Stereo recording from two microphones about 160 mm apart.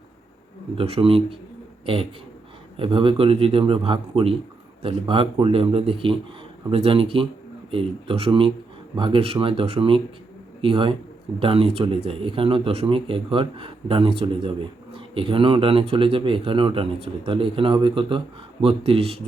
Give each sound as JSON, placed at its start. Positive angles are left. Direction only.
{"t": 0.8, "sound": "a man's voice", "side_deg": -35}